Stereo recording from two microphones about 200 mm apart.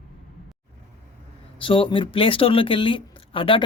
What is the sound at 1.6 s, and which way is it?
Speech, 25° left (ahead or behind).